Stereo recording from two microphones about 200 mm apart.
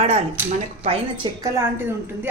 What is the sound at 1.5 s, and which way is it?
Speech, 10° right (ahead or behind).